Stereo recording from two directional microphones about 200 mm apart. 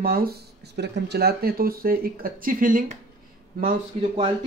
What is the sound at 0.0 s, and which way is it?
Speech, 45° right (ahead or behind).